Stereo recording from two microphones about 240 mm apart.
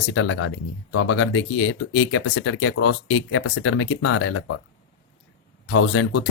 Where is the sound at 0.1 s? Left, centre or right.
Left.